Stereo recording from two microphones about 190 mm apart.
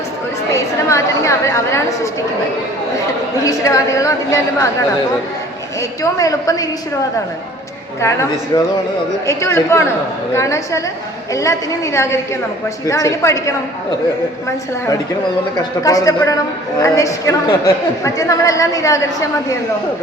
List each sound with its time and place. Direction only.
0.5 s a woman's voice: 15° left (ahead or behind)
3.4 s a woman's voice: 15° left (ahead or behind)
6.0 s a woman's voice: 20° left (ahead or behind)
8.0 s a woman's voice: 15° left (ahead or behind)
15.8 s a woman's voice: 20° left (ahead or behind)